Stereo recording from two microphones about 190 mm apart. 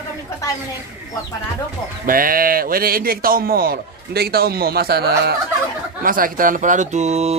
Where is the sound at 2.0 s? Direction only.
45° right (ahead or behind).